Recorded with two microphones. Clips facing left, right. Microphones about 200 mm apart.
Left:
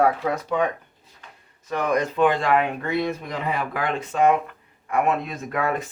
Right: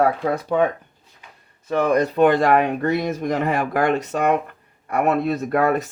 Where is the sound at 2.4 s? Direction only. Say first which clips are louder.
Right 4 dB; 40° right (ahead or behind).